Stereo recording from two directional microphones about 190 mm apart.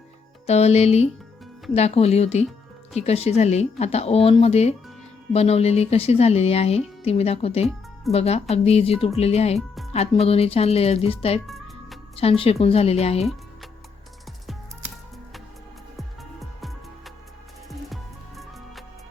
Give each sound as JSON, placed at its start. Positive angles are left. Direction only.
{"t": 0.4, "sound": "speech", "side_deg": 35}
{"t": 11.4, "sound": "music", "side_deg": 0}
{"t": 12.1, "sound": "speech", "side_deg": 30}
{"t": 16.0, "sound": "music", "side_deg": 0}